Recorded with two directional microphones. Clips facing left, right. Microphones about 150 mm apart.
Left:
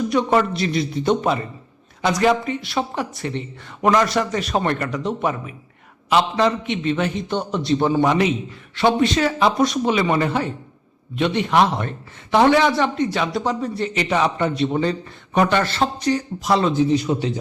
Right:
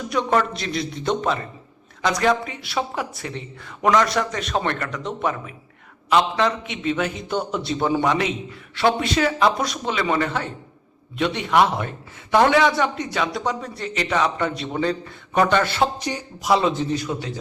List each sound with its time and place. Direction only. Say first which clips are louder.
0.1 s a man's voice: even; 5° left (ahead or behind)
9.0 s a man's voice: left 2 dB; centre (ahead or behind)
15.7 s a man's voice: left 2 dB; 10° right (ahead or behind)
16.9 s speech: left 6 dB; 20° left (ahead or behind)